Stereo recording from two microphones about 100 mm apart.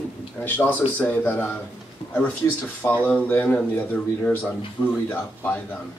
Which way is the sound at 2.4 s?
30° left (ahead or behind).